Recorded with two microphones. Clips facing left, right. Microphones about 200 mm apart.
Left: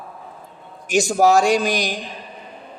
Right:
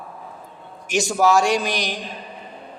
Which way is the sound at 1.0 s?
45° left (ahead or behind).